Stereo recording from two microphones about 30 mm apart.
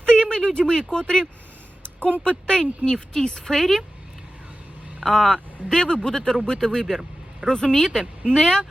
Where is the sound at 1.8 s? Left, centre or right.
Left.